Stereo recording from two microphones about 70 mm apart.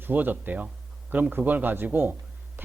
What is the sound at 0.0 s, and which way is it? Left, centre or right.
Speech, right.